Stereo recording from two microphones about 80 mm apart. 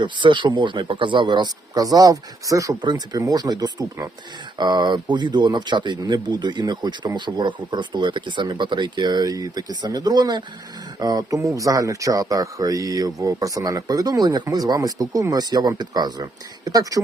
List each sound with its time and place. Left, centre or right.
0.0 s speech: right
1.7 s speech: right
2.8 s speech: right
3.2 s speech: right